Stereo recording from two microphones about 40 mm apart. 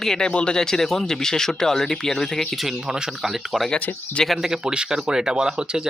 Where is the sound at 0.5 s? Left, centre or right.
Centre.